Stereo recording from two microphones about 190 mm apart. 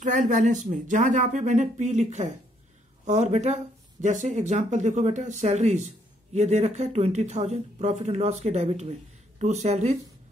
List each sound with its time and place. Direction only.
0.0 s speech: 40° right (ahead or behind)